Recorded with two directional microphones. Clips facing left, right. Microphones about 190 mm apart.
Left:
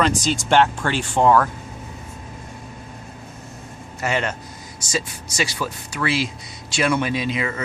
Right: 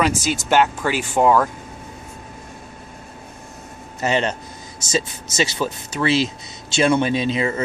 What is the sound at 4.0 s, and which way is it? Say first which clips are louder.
Speech: right 3 dB; 20° right (ahead or behind).